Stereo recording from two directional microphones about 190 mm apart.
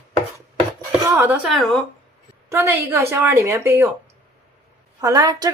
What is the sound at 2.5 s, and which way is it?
A woman's voice, 10° right (ahead or behind).